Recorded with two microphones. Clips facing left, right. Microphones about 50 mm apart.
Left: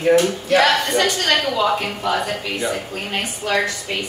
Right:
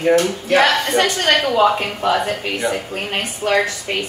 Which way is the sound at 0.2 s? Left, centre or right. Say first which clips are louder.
Right 1 dB; right.